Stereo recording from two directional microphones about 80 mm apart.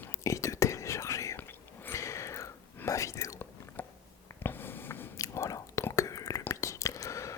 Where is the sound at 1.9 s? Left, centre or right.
Left.